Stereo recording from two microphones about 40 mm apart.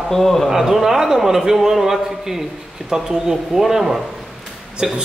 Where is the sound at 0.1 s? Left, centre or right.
Centre.